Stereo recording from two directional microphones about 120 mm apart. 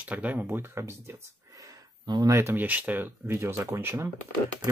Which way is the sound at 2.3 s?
20° right (ahead or behind).